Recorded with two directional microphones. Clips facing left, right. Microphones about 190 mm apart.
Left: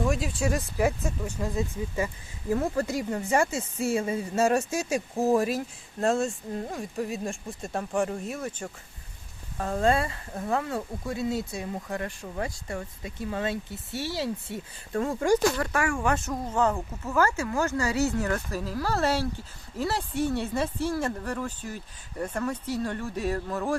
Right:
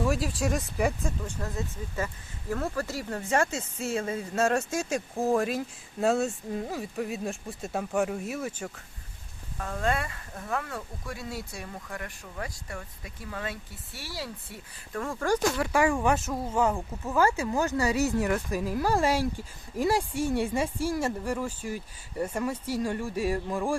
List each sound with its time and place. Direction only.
0.0 s speech: centre (ahead or behind)
9.6 s speech: 35° left (ahead or behind)
15.5 s speech: 5° right (ahead or behind)
15.8 s speech: 15° right (ahead or behind)
16.1 s speech: 5° right (ahead or behind)